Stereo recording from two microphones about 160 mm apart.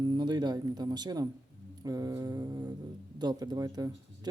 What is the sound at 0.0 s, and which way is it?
Speech, 25° right (ahead or behind).